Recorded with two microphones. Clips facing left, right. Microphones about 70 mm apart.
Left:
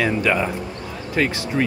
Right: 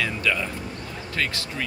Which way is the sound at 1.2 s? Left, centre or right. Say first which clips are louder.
Left 8 dB; centre.